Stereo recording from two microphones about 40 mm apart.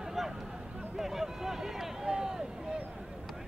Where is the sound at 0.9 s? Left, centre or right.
Centre.